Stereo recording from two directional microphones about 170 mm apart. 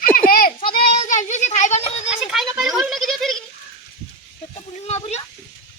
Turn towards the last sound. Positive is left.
turn(degrees=40)  # may be behind; listen again after turning